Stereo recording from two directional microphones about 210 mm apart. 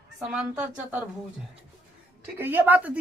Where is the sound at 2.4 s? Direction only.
10° right (ahead or behind).